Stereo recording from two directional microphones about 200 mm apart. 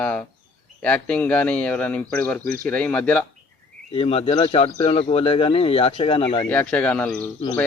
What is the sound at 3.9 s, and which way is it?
Speech, 30° left (ahead or behind).